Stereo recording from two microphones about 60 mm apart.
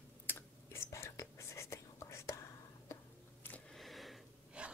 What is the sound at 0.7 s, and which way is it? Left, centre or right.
Whispering, left.